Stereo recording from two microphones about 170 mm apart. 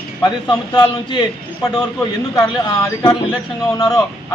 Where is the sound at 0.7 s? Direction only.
25° left (ahead or behind).